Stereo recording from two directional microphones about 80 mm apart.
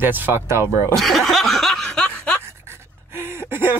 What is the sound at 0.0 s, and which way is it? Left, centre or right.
Speech, right.